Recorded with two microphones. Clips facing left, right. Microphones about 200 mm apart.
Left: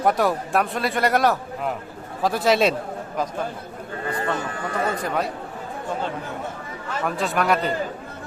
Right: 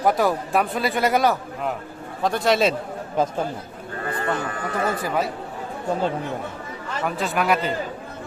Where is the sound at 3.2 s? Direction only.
25° right (ahead or behind).